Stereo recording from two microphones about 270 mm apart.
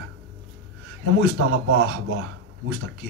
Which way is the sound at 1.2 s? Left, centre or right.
Right.